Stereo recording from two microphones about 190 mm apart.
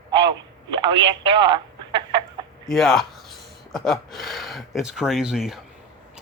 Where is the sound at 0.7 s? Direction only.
25° right (ahead or behind).